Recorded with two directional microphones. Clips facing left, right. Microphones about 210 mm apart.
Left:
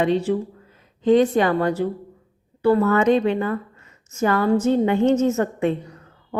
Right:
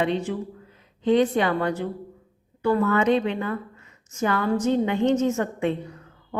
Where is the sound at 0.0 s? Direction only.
40° left (ahead or behind).